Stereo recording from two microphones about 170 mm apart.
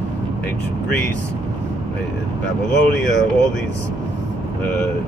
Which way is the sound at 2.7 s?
90° left.